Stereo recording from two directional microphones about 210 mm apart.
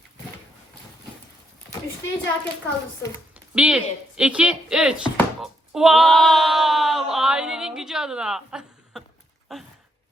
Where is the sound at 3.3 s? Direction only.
5° right (ahead or behind).